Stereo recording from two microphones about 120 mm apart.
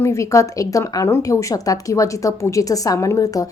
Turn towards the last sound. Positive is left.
turn(degrees=30)  # may be behind; listen again after turning